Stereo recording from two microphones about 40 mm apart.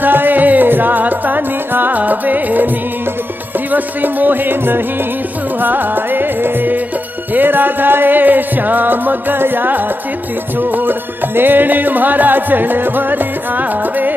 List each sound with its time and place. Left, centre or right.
0.0 s music: right
3.7 s music: right